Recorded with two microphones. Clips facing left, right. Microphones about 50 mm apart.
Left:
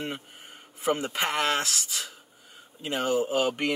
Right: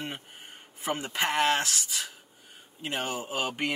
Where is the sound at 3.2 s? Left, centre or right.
Centre.